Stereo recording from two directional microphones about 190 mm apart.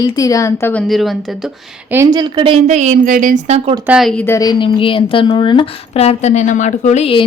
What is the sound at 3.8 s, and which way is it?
Speech, 5° right (ahead or behind).